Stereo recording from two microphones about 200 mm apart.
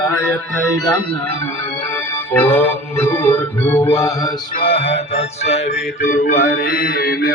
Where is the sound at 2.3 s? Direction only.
10° left (ahead or behind).